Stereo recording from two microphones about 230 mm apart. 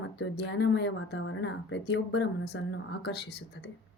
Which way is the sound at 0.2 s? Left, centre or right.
Left.